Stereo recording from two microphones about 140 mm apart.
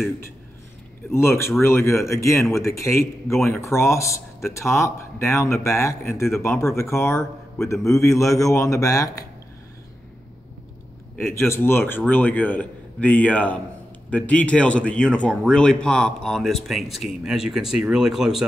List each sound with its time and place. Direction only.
1.1 s speech: 20° left (ahead or behind)
11.1 s a man's voice: 20° left (ahead or behind); by 18.4 s 5° right (ahead or behind)